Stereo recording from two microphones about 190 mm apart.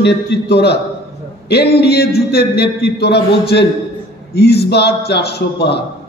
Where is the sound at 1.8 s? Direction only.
60° left (ahead or behind).